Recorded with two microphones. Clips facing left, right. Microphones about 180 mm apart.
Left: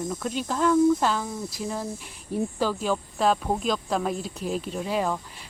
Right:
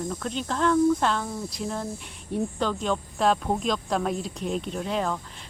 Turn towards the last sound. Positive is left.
turn(degrees=5)  # may be behind; listen again after turning